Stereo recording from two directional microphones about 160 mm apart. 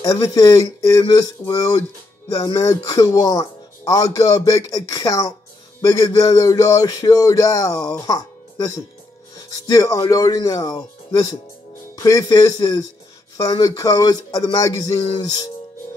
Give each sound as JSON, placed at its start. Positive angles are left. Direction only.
{"t": 0.0, "sound": "speech", "side_deg": 20}